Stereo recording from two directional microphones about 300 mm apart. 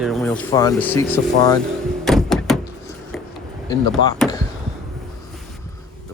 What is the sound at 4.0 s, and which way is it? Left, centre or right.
Speech, right.